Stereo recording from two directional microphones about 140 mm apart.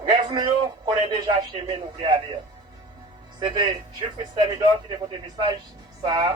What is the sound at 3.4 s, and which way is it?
A man's voice, 35° right (ahead or behind).